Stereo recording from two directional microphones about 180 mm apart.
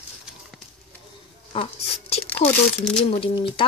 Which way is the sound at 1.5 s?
30° left (ahead or behind).